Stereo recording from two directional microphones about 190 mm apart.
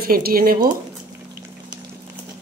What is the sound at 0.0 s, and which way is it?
Speech, 50° right (ahead or behind).